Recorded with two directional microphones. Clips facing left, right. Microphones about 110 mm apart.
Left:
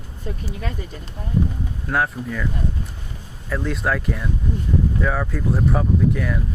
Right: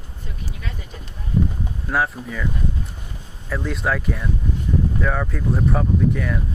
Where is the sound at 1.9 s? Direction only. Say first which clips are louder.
Even; centre (ahead or behind).